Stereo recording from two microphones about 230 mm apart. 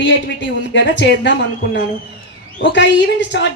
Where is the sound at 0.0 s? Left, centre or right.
Left.